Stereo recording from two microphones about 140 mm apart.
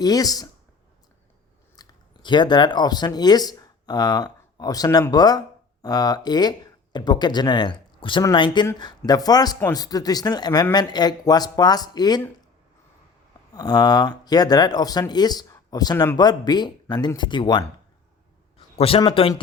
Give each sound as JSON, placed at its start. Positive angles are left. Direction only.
{"t": 0.0, "sound": "speech", "side_deg": 25}
{"t": 1.7, "sound": "speech", "side_deg": 30}
{"t": 13.5, "sound": "speech", "side_deg": 30}
{"t": 18.5, "sound": "a man's voice", "side_deg": 45}